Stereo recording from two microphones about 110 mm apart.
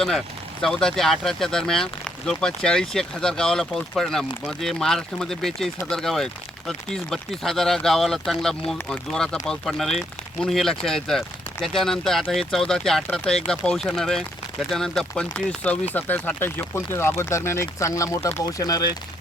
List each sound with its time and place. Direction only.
0.6 s speech: 5° left (ahead or behind); by 18.4 s 25° left (ahead or behind)
18.4 s speech: 35° left (ahead or behind)